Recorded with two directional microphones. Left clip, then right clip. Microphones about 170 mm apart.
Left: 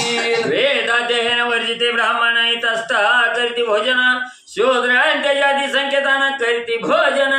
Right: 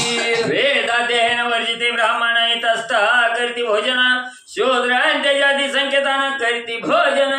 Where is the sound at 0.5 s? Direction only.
20° left (ahead or behind).